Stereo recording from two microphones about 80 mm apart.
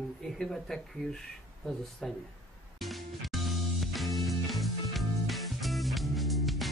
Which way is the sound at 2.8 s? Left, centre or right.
Centre.